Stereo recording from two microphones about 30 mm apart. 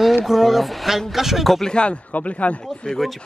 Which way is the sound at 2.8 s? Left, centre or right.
Left.